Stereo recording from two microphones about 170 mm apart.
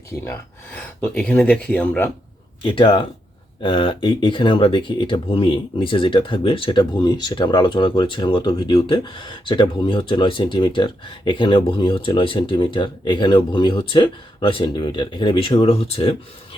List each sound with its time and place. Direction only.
0.8 s speech: 5° left (ahead or behind)
2.6 s speech: 30° left (ahead or behind)